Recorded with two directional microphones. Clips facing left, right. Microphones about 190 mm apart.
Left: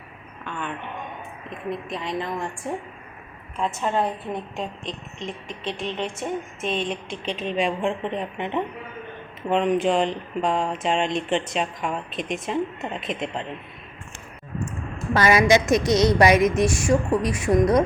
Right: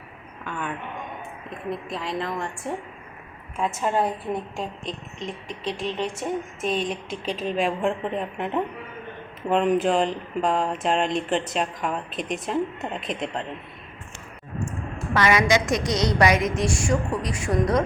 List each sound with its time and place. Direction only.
0.4 s a sound: 5° right (ahead or behind)
1.5 s speech: centre (ahead or behind)
6.6 s speech: centre (ahead or behind)
15.1 s a woman's voice: 30° left (ahead or behind)